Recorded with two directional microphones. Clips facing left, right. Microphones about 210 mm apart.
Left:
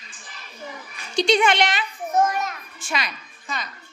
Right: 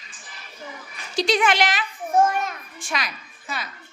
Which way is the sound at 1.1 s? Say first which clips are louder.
Left 2 dB; centre (ahead or behind).